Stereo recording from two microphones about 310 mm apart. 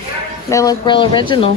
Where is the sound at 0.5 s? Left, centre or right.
Centre.